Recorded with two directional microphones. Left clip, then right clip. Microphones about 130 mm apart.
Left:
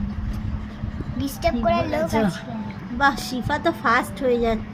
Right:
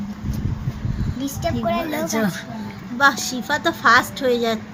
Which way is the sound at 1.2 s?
10° left (ahead or behind).